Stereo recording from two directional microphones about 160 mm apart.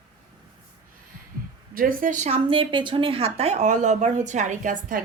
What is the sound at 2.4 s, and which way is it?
Speech, 30° right (ahead or behind).